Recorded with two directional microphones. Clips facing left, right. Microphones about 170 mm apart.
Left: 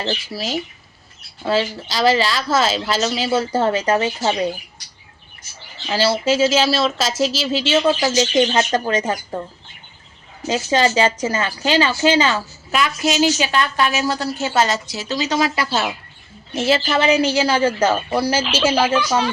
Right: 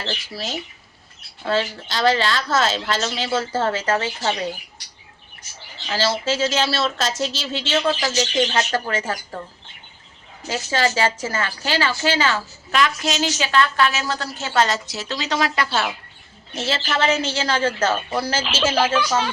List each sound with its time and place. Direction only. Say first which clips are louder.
0.3 s a woman's voice: left 5 dB; 5° left (ahead or behind); by 4.5 s 20° left (ahead or behind)
5.9 s a woman's voice: left 4 dB; 15° left (ahead or behind)
7.7 s speech: left 4 dB; 15° left (ahead or behind)
10.4 s a woman's voice: left 4 dB; 20° left (ahead or behind)
18.4 s speech: left 3 dB; centre (ahead or behind)